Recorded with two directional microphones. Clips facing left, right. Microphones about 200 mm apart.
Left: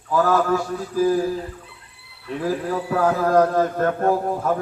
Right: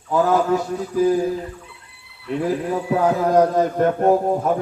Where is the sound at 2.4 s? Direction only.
20° right (ahead or behind).